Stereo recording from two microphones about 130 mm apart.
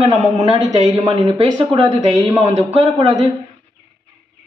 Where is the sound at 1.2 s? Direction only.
35° right (ahead or behind).